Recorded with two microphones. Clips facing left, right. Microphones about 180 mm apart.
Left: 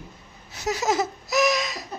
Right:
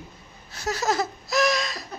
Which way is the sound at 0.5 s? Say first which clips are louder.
Left 1 dB; 20° left (ahead or behind).